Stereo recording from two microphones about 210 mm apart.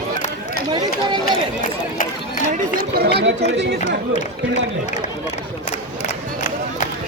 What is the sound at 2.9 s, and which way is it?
Speech, 50° right (ahead or behind).